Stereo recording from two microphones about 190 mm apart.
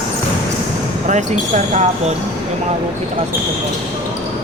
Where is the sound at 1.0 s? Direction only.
40° right (ahead or behind).